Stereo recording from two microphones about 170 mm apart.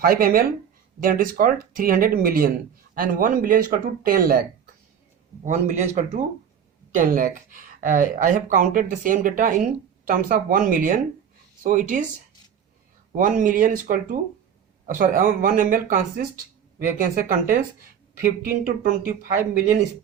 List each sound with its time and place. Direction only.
0.0 s speech: 60° right (ahead or behind)
5.5 s speech: 45° right (ahead or behind)
6.9 s speech: 55° right (ahead or behind)
13.1 s speech: 50° right (ahead or behind)